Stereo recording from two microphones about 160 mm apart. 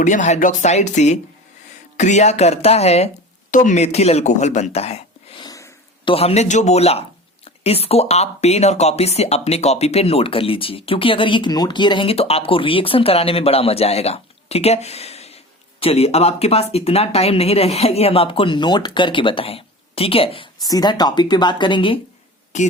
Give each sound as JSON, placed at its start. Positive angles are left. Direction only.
{"t": 0.0, "sound": "speech", "side_deg": 50}
{"t": 5.4, "sound": "sniff", "side_deg": 20}
{"t": 6.1, "sound": "speech", "side_deg": 40}
{"t": 20.6, "sound": "speech", "side_deg": 25}
{"t": 22.5, "sound": "speech", "side_deg": 45}